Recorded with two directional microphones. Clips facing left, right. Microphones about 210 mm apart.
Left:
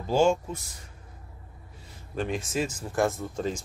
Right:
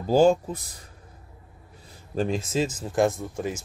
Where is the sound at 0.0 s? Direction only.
35° right (ahead or behind).